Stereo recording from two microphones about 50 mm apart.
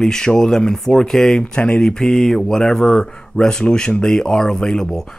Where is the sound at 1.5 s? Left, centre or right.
Left.